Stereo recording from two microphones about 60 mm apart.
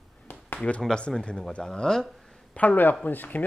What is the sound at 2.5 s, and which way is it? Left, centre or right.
Speech, left.